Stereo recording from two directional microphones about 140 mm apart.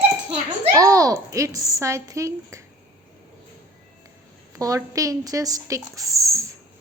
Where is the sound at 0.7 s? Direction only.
25° right (ahead or behind).